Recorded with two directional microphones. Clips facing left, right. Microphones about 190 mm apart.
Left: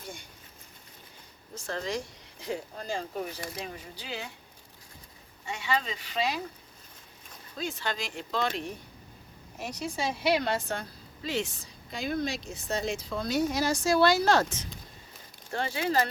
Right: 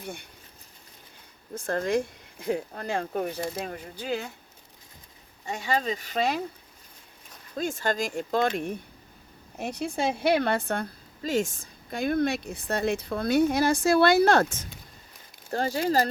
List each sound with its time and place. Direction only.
0.0 s a sound: 60° right (ahead or behind)
1.5 s a woman's voice: 55° right (ahead or behind)
5.5 s speech: 40° right (ahead or behind)
7.5 s a woman's voice: 50° right (ahead or behind)
15.5 s speech: 40° right (ahead or behind)